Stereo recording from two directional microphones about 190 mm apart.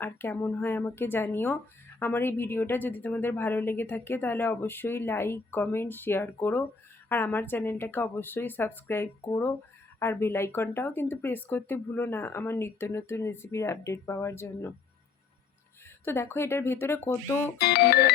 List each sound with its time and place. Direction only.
0.0 s a woman's voice: 10° left (ahead or behind)
16.0 s a woman's voice: 10° left (ahead or behind)
17.6 s speech: 55° left (ahead or behind)